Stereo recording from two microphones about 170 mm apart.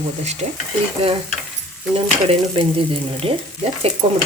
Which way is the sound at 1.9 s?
35° right (ahead or behind).